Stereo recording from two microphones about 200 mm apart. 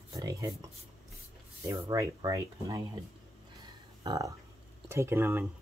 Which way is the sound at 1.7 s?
15° right (ahead or behind).